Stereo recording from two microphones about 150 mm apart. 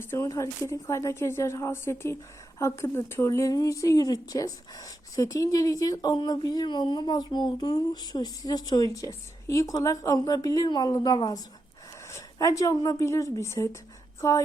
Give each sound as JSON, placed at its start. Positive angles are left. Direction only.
{"t": 0.0, "sound": "a woman's voice", "side_deg": 20}